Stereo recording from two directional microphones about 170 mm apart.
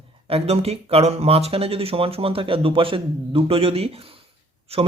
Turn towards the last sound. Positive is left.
turn(degrees=-35)  # may be behind; listen again after turning